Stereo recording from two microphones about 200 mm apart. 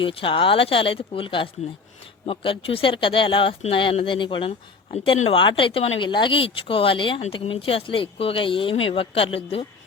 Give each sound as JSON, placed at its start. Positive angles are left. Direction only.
{"t": 0.0, "sound": "speech", "side_deg": 25}